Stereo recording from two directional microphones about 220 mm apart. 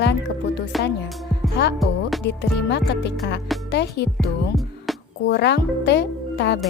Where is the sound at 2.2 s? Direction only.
50° left (ahead or behind).